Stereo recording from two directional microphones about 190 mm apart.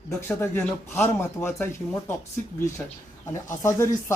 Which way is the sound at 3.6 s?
15° left (ahead or behind).